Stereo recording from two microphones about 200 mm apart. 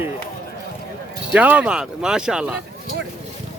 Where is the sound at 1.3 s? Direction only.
5° right (ahead or behind).